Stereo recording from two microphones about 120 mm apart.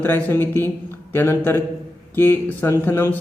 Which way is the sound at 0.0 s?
15° left (ahead or behind).